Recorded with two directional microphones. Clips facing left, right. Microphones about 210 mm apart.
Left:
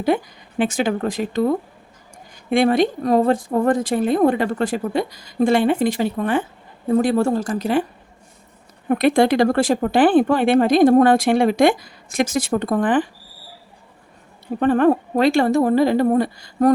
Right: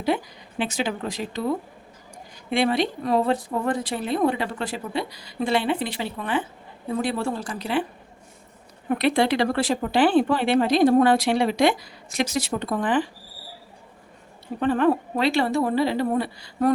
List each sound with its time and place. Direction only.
0.1 s speech: 50° left (ahead or behind)
8.9 s speech: 45° left (ahead or behind)
14.6 s speech: 50° left (ahead or behind)